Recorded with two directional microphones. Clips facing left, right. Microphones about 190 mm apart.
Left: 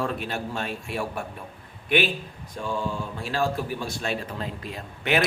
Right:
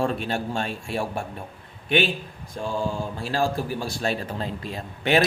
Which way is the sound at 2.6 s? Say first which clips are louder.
Right 2 dB; 35° right (ahead or behind).